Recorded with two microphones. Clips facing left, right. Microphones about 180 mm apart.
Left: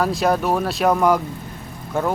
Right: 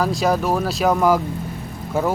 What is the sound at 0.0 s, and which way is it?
A man's voice, centre (ahead or behind).